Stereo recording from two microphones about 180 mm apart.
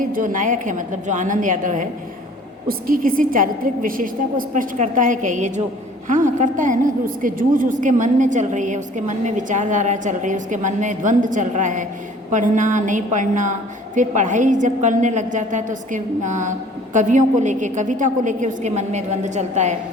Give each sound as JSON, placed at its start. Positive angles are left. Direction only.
{"t": 0.0, "sound": "a woman's voice", "side_deg": -45}